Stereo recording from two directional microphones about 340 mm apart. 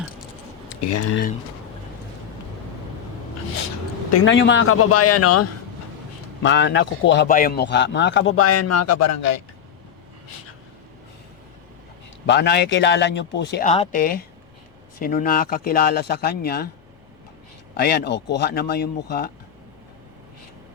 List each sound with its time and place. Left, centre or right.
0.8 s speech: left
4.3 s a man's voice: left
6.4 s a man's voice: left
12.2 s speech: left
17.7 s speech: left